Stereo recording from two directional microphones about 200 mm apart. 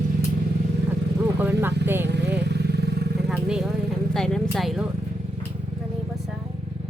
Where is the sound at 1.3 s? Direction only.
10° right (ahead or behind).